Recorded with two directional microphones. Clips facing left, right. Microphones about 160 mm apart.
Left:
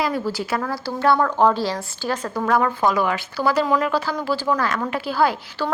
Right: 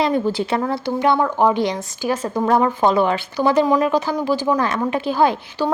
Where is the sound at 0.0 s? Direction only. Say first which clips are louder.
Right 5 dB; 25° right (ahead or behind).